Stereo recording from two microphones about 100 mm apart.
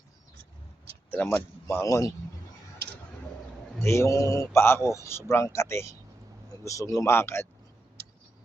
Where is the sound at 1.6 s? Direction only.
30° left (ahead or behind).